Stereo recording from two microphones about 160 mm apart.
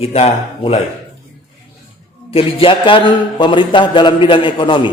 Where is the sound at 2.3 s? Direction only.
35° left (ahead or behind).